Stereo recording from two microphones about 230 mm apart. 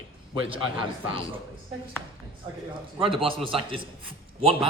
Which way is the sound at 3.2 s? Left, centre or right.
Right.